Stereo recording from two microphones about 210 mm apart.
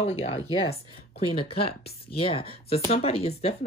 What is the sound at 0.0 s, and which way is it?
Speech, 30° left (ahead or behind).